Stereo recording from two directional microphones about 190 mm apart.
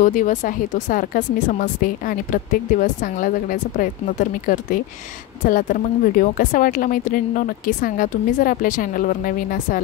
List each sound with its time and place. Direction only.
0.0 s speech: 40° left (ahead or behind)